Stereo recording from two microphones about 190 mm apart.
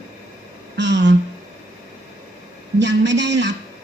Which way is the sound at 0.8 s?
70° right (ahead or behind).